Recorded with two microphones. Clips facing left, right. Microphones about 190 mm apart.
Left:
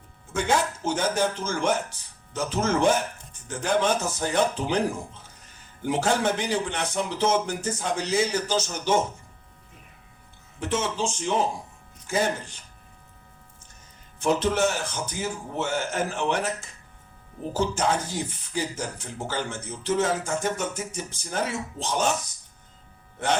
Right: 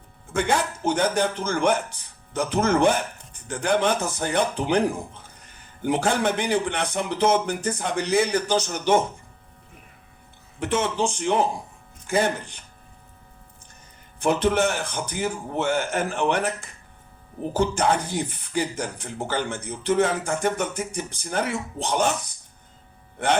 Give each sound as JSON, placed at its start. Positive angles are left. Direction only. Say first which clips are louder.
{"t": 0.8, "sound": "speech", "louder": "right 4 dB", "side_deg": -15}
{"t": 1.4, "sound": "speech", "louder": "right 3 dB", "side_deg": -60}
{"t": 10.6, "sound": "speech", "louder": "right 3 dB", "side_deg": -60}
{"t": 14.2, "sound": "speech", "louder": "right 2 dB", "side_deg": -60}